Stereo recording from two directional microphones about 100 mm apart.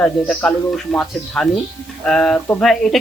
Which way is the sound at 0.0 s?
10° left (ahead or behind).